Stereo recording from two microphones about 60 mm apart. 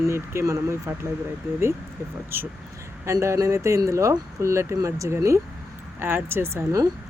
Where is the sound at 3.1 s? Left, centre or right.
Right.